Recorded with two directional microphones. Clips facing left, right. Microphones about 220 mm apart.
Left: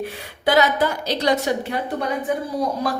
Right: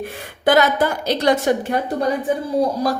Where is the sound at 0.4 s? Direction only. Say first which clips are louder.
Right 2 dB; 50° right (ahead or behind).